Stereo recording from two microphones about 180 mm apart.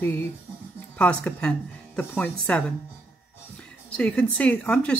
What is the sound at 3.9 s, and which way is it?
Speech, 5° left (ahead or behind).